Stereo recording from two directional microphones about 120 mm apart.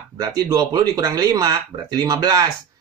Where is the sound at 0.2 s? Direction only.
35° right (ahead or behind).